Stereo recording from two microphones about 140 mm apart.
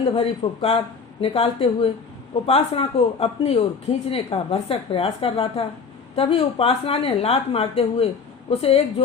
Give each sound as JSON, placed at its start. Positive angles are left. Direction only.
{"t": 0.2, "sound": "speech", "side_deg": 40}